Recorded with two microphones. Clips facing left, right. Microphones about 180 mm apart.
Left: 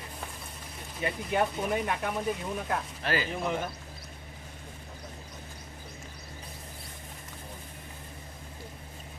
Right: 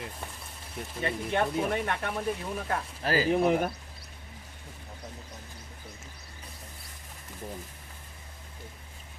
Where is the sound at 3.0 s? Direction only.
35° right (ahead or behind).